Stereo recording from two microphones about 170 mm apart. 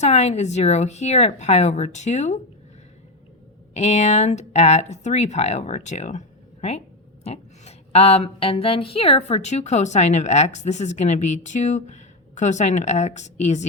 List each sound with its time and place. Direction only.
0.0 s speech: 40° left (ahead or behind)
3.8 s a woman's voice: 40° left (ahead or behind)